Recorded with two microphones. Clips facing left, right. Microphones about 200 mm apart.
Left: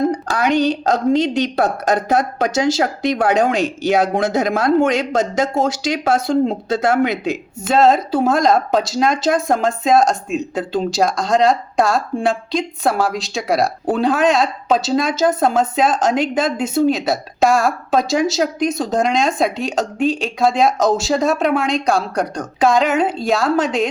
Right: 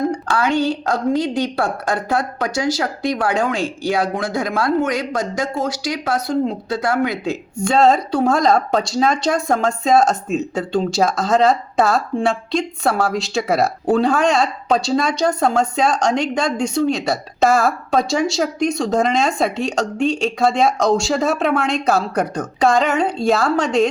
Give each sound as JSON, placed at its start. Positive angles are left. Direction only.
{"t": 0.3, "sound": "a woman's voice", "side_deg": 20}
{"t": 7.6, "sound": "speech", "side_deg": 5}